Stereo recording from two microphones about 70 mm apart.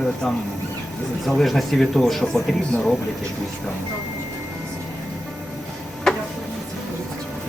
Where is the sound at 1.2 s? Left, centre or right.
Centre.